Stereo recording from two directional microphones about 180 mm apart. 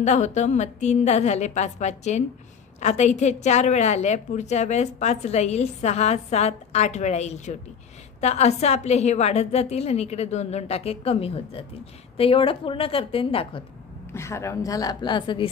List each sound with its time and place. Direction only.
0.0 s a woman's voice: 40° left (ahead or behind)
14.1 s a woman's voice: 15° left (ahead or behind)